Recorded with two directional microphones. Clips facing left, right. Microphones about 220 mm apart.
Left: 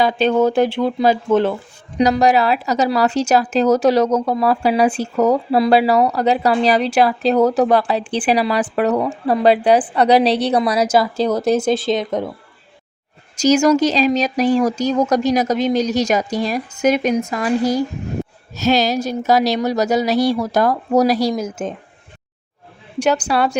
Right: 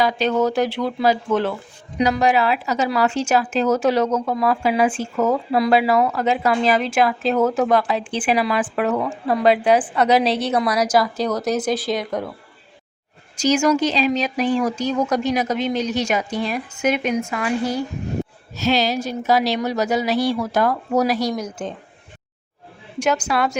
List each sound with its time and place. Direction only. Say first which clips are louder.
0.0 s speech: left 4 dB; 30° left (ahead or behind)
2.0 s speech: left 4 dB; 40° left (ahead or behind)
13.3 s speech: left 4 dB; 40° left (ahead or behind); by 21.8 s 25° left (ahead or behind)
23.0 s speech: left 3 dB; 35° left (ahead or behind)